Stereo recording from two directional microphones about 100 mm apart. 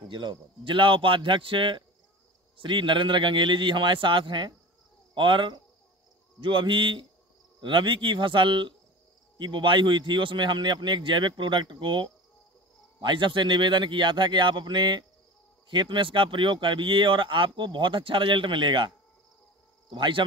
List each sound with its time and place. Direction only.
0.1 s a man's voice: 55° right (ahead or behind)